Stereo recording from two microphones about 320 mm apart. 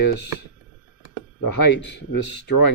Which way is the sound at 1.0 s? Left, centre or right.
Left.